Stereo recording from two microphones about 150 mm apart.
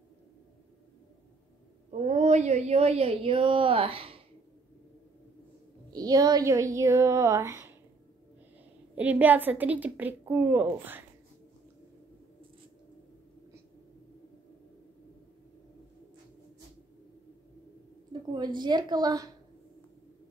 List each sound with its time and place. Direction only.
1.9 s a woman's voice: 50° right (ahead or behind)
5.9 s speech: 25° right (ahead or behind)
8.9 s a woman's voice: 10° right (ahead or behind)
18.3 s speech: 30° right (ahead or behind)